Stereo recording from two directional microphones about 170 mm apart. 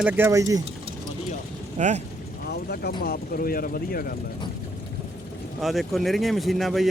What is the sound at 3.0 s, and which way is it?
Speech, 60° left (ahead or behind).